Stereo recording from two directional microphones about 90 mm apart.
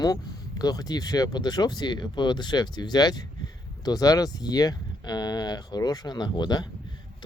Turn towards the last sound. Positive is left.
turn(degrees=50)  # may be behind; listen again after turning